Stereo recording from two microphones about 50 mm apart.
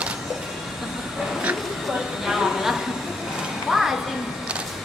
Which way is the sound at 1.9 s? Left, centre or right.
Centre.